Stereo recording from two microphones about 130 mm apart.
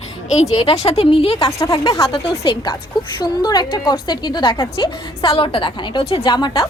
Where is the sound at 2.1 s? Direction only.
40° left (ahead or behind).